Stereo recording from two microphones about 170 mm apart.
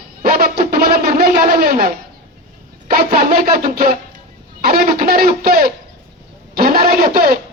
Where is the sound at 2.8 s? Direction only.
65° right (ahead or behind).